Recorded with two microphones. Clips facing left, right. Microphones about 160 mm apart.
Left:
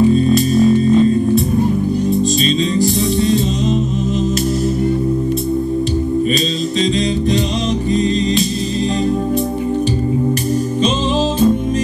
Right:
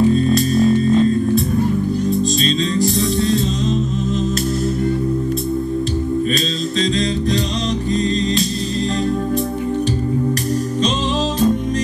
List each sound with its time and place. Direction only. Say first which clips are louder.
0.1 s music: left 3 dB; 10° left (ahead or behind)
2.4 s music: left 2 dB; centre (ahead or behind)